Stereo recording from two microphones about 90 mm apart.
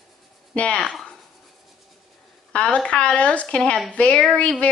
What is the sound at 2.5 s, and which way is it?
Speech, 10° left (ahead or behind).